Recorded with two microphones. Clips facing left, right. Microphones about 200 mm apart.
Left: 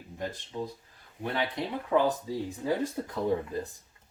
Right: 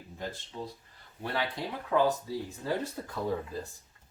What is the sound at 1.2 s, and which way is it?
Speech, 20° left (ahead or behind).